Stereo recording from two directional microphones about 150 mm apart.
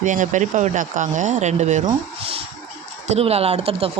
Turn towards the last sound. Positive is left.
turn(degrees=-40)  # may be behind; listen again after turning